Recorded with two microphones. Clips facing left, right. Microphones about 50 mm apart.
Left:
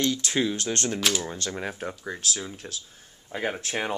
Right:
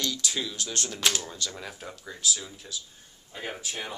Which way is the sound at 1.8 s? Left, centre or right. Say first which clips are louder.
Left 5 dB; left.